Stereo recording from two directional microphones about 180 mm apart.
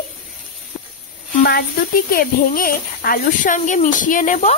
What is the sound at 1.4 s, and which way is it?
Speech, 55° left (ahead or behind).